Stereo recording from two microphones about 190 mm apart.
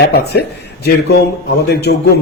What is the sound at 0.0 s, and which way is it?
Speech, 60° left (ahead or behind).